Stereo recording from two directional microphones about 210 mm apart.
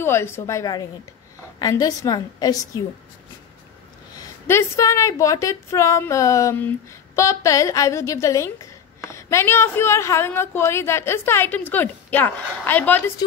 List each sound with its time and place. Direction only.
0.0 s a woman's voice: 10° left (ahead or behind)
4.5 s a woman's voice: 15° left (ahead or behind)